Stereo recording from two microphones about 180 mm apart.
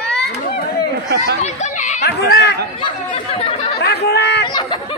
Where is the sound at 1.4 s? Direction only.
40° left (ahead or behind).